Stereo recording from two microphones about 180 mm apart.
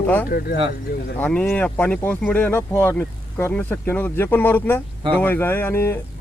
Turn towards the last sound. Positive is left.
turn(degrees=10)  # may be behind; listen again after turning